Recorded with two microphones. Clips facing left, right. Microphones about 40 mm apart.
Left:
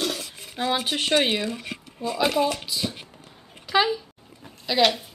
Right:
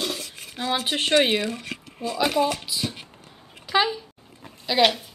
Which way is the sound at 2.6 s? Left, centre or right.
Centre.